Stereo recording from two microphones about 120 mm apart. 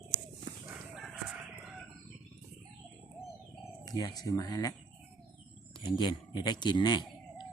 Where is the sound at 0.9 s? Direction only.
5° right (ahead or behind).